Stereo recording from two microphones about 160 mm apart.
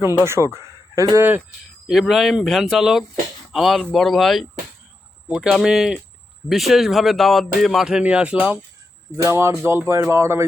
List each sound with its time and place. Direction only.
0.3 s speech: 15° right (ahead or behind)
1.9 s speech: centre (ahead or behind)